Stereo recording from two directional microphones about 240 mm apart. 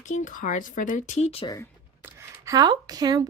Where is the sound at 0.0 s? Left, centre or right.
Left.